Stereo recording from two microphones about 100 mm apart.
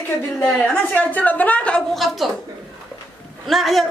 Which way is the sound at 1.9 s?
Centre (ahead or behind).